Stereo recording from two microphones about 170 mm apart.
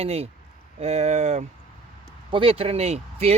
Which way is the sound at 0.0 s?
35° right (ahead or behind).